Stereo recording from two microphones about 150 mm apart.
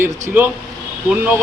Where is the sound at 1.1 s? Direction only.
15° right (ahead or behind).